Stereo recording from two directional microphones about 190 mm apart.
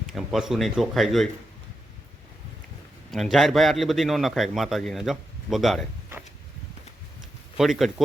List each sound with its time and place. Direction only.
0.1 s a man's voice: centre (ahead or behind)
3.1 s a man's voice: centre (ahead or behind)
7.5 s a man's voice: centre (ahead or behind)